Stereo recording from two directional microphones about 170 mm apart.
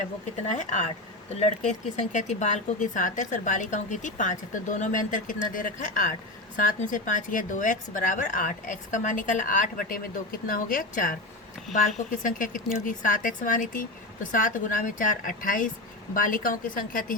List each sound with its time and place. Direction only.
0.4 s a woman's voice: 45° left (ahead or behind)